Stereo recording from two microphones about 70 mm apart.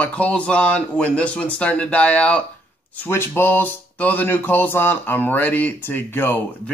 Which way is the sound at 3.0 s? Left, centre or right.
Left.